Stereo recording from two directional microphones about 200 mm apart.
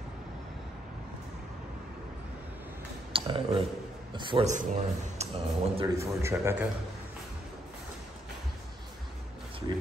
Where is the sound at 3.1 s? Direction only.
25° right (ahead or behind).